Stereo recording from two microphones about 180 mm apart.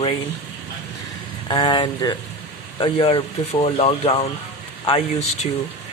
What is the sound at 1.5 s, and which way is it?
Speech, 25° left (ahead or behind).